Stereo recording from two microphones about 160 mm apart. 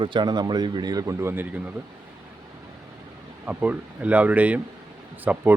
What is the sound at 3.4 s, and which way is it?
Speech, 10° right (ahead or behind).